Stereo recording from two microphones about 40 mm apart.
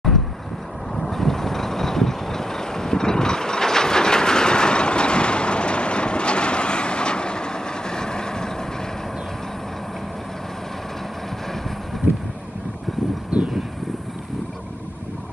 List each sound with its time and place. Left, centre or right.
0.9 s vehicle: centre
13.3 s vehicle: right